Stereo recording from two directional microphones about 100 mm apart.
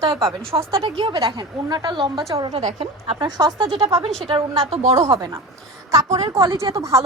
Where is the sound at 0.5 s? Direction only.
65° right (ahead or behind).